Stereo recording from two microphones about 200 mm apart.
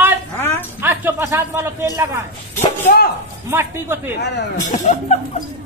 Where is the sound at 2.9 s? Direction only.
45° left (ahead or behind).